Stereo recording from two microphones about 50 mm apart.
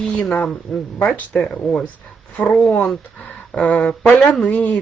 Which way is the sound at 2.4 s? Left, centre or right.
Left.